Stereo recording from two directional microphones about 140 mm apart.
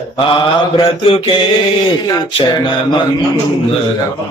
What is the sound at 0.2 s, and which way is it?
A man's voice, 40° left (ahead or behind).